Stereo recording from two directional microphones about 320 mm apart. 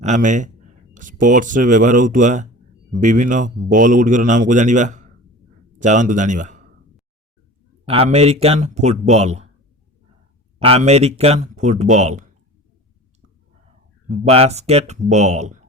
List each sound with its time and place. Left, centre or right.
0.0 s a man's voice: right
7.9 s speech: centre
10.6 s speech: centre
14.1 s speech: centre